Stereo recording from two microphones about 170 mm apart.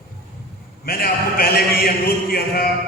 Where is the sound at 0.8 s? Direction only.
60° left (ahead or behind).